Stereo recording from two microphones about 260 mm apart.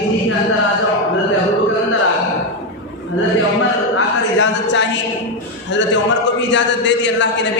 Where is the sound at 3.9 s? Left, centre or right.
Left.